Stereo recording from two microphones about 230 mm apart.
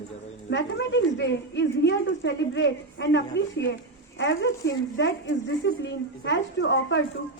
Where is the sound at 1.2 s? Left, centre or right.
Left.